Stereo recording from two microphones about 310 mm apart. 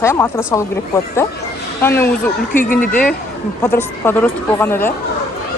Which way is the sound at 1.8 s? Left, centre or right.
Centre.